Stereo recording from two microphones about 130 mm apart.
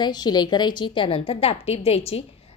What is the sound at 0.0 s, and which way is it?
Speech, 30° left (ahead or behind).